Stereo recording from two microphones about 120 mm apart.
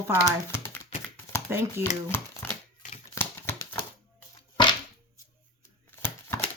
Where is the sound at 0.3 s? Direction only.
20° left (ahead or behind).